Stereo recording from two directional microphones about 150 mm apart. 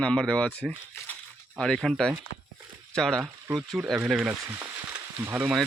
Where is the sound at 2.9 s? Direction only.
5° left (ahead or behind).